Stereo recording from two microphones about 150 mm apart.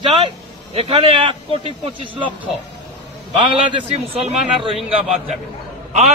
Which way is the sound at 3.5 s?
30° right (ahead or behind).